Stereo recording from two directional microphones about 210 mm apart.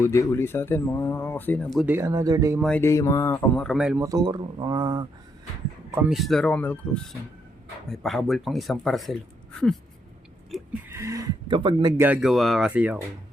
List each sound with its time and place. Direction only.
0.0 s speech: 15° left (ahead or behind)
2.0 s speech: 15° right (ahead or behind)
2.6 s speech: 5° left (ahead or behind)
4.0 s speech: 20° right (ahead or behind)
5.9 s speech: 5° right (ahead or behind)
10.5 s a sound: centre (ahead or behind)
10.9 s speech: 15° right (ahead or behind)
12.0 s speech: 5° right (ahead or behind)